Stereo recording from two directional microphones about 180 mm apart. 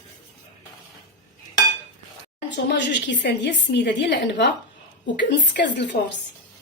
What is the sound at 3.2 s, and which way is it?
A woman's voice, 75° left (ahead or behind).